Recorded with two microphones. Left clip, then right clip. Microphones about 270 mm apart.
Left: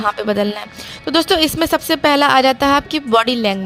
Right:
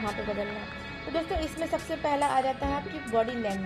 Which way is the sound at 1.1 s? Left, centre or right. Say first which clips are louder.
Left 17 dB; left.